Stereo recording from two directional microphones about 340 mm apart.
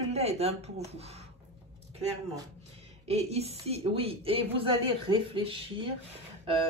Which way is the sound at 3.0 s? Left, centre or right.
Centre.